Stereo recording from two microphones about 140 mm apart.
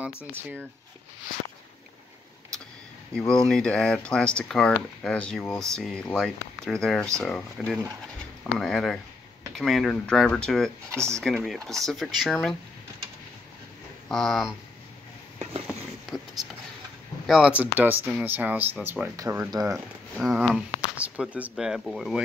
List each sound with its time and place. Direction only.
3.2 s speech: 5° left (ahead or behind)
10.9 s speech: 20° right (ahead or behind)
11.1 s speech: centre (ahead or behind)
14.0 s speech: 5° left (ahead or behind)
17.3 s speech: 5° right (ahead or behind)
20.2 s speech: 5° right (ahead or behind)